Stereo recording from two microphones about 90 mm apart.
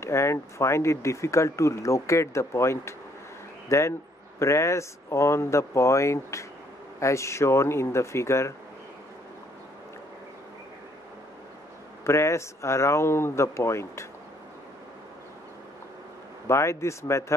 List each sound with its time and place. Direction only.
0.0 s speech: 30° left (ahead or behind)
12.0 s speech: 30° left (ahead or behind)
16.4 s speech: 30° left (ahead or behind)